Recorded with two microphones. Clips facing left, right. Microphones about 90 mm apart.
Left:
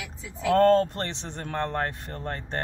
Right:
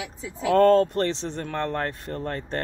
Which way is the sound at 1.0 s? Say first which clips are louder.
Right 7 dB; 20° left (ahead or behind).